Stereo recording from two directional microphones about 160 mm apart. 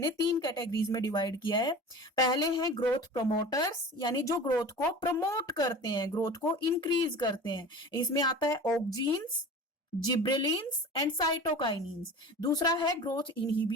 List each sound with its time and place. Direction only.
0.0 s speech: 25° left (ahead or behind)
10.1 s speech: 25° left (ahead or behind)